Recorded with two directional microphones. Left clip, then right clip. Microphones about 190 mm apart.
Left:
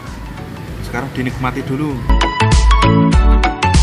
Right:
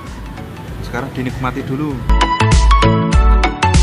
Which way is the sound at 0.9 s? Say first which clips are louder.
Left 1 dB; 5° right (ahead or behind).